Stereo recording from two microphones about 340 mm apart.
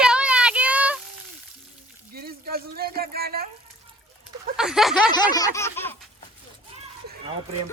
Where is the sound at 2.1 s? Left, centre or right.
Right.